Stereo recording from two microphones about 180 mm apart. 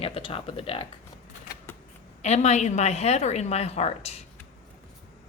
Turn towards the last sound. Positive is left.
turn(degrees=35)  # may be behind; listen again after turning